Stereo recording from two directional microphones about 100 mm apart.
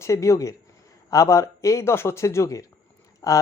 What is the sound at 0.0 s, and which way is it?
Speech, 30° left (ahead or behind).